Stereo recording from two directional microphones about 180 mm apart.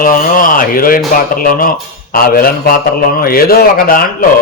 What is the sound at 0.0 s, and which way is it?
A man's voice, 50° left (ahead or behind).